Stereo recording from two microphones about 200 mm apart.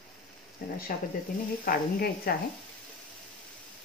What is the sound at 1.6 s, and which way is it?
Speech, 50° left (ahead or behind).